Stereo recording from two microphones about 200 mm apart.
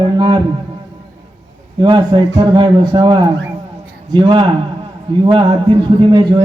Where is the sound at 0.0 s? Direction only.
20° right (ahead or behind).